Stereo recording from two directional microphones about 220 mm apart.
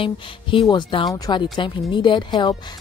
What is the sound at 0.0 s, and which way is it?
Speech, 25° left (ahead or behind).